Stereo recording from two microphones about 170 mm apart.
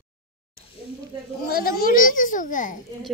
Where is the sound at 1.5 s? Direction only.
60° left (ahead or behind).